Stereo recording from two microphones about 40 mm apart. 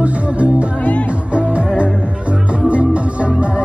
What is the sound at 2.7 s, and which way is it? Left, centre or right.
Music, right.